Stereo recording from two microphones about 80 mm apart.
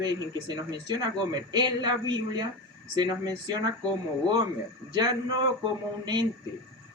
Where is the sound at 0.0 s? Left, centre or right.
Right.